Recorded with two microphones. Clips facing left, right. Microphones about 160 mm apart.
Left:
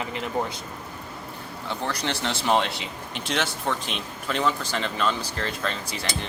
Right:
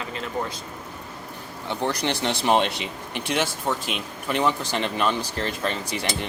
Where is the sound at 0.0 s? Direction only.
20° left (ahead or behind).